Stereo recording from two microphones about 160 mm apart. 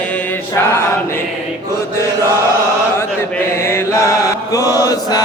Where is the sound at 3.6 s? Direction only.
15° left (ahead or behind).